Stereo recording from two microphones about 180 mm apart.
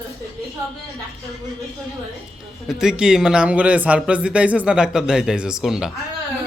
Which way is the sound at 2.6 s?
Centre (ahead or behind).